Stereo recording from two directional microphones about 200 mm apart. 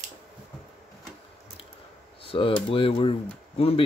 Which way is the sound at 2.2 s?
25° left (ahead or behind).